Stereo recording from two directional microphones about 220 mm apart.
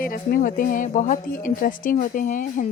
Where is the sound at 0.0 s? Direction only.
40° left (ahead or behind).